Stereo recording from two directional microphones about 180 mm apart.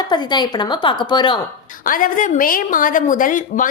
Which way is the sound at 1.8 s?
50° left (ahead or behind).